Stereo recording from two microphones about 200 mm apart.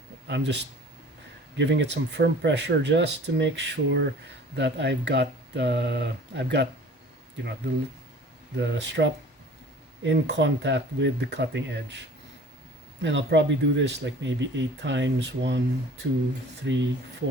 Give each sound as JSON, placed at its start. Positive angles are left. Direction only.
{"t": 0.3, "sound": "speech", "side_deg": -60}
{"t": 8.5, "sound": "speech", "side_deg": -60}